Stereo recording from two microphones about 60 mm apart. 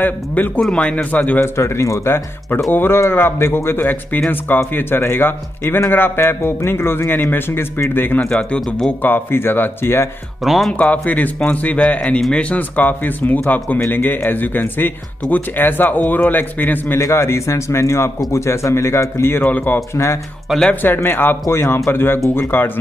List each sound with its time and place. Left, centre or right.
0.0 s a man's voice: left
0.6 s speech: centre
0.9 s a man's voice: left
1.4 s a man's voice: left
8.2 s speech: centre
9.0 s a man's voice: left
10.4 s speech: centre
10.7 s a man's voice: left
17.0 s speech: left
20.5 s speech: centre
20.8 s a man's voice: left
21.5 s speech: left
21.9 s a man's voice: left